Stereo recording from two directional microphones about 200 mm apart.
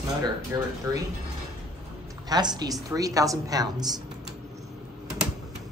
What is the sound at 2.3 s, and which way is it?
A woman's voice, 20° right (ahead or behind).